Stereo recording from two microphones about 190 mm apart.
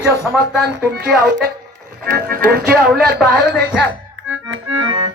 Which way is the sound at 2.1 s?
50° right (ahead or behind).